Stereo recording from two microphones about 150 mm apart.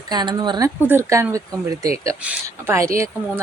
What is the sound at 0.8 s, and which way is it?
Speech, 15° right (ahead or behind).